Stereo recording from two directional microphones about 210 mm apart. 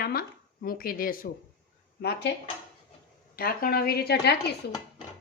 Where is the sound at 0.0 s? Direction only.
45° left (ahead or behind).